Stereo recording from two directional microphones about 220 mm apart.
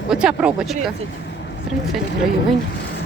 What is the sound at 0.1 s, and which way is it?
Speech, 5° right (ahead or behind).